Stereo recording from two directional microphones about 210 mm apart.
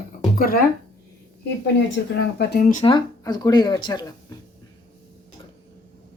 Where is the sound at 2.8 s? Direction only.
20° left (ahead or behind).